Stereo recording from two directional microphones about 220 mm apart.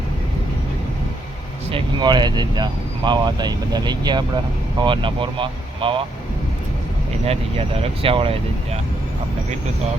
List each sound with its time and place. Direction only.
1.7 s speech: 20° right (ahead or behind)
7.8 s speech: 25° right (ahead or behind)